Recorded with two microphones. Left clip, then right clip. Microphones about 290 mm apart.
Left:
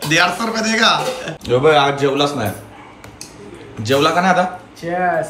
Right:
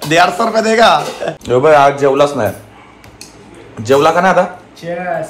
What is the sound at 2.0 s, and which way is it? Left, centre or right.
Speech, centre.